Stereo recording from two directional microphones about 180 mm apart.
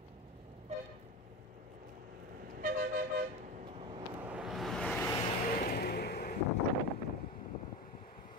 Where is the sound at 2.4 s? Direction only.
50° right (ahead or behind).